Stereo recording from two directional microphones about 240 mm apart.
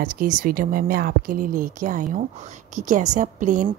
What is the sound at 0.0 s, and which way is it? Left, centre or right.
A woman's voice, right.